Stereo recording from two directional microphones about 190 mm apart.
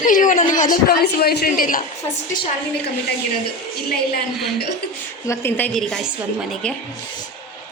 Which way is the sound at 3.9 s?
55° left (ahead or behind).